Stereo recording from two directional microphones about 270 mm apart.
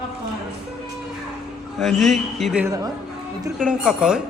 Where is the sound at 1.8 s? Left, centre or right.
Centre.